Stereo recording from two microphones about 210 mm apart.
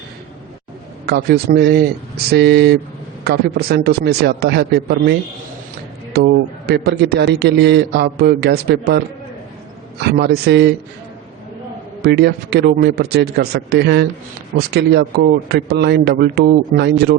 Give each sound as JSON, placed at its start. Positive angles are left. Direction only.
{"t": 1.0, "sound": "a man's voice", "side_deg": -50}
{"t": 6.1, "sound": "a man's voice", "side_deg": -55}
{"t": 10.0, "sound": "a man's voice", "side_deg": -50}
{"t": 12.0, "sound": "a man's voice", "side_deg": -50}